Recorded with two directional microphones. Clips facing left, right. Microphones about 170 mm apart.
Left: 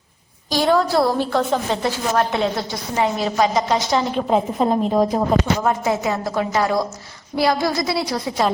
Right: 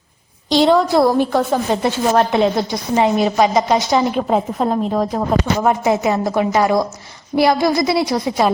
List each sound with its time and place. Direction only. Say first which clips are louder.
0.5 s a woman's voice: right 4 dB; 20° right (ahead or behind)
4.3 s a woman's voice: right 1 dB; centre (ahead or behind)
5.6 s a woman's voice: right 4 dB; 20° right (ahead or behind)